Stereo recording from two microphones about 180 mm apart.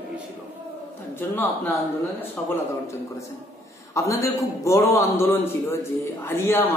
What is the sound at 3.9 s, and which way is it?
A man's voice, 15° left (ahead or behind).